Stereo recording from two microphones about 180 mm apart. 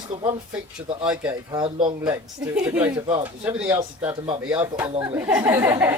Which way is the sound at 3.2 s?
10° right (ahead or behind).